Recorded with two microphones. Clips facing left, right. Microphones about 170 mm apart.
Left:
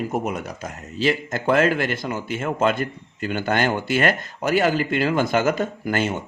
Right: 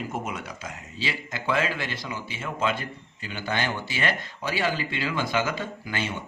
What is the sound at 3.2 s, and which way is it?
Speech, 50° left (ahead or behind).